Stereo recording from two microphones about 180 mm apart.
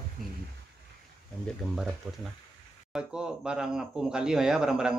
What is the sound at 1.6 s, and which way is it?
Speech, centre (ahead or behind).